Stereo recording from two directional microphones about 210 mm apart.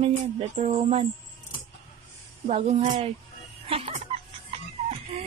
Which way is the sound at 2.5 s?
30° right (ahead or behind).